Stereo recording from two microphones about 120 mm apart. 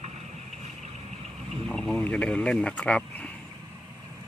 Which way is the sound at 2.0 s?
10° left (ahead or behind).